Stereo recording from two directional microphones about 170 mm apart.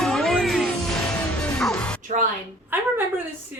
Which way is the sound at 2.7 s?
10° right (ahead or behind).